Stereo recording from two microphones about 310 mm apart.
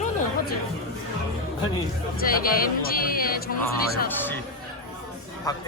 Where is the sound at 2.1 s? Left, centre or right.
Left.